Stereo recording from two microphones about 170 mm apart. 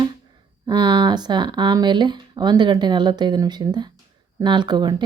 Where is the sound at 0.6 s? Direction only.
25° right (ahead or behind).